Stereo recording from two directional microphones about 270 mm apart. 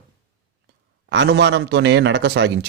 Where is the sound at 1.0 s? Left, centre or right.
Right.